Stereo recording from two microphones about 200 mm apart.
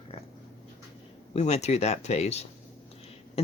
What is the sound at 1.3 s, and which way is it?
Speech, 35° left (ahead or behind).